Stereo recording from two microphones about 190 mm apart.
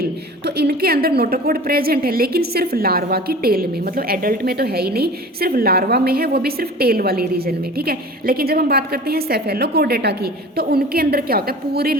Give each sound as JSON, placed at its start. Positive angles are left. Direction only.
{"t": 0.0, "sound": "a woman's voice", "side_deg": -60}